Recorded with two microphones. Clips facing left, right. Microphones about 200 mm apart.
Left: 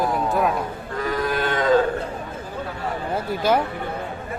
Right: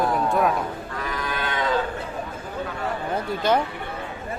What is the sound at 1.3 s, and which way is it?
Livestock, 40° left (ahead or behind).